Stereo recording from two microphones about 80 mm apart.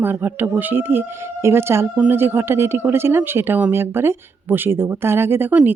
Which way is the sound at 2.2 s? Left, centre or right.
Right.